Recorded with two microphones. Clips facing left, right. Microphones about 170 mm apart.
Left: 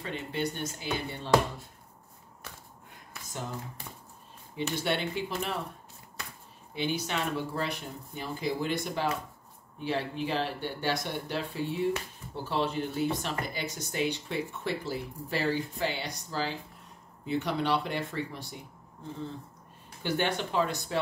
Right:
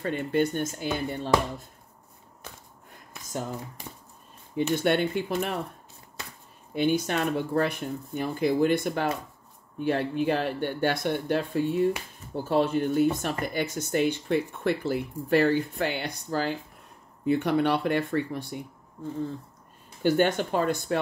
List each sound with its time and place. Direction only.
0.0 s speech: 50° right (ahead or behind)
4.6 s speech: 55° right (ahead or behind)
6.7 s speech: 50° right (ahead or behind)
20.0 s speech: 50° right (ahead or behind)